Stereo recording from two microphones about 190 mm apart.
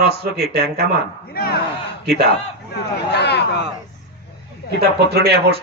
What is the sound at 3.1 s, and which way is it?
Speech, 60° left (ahead or behind).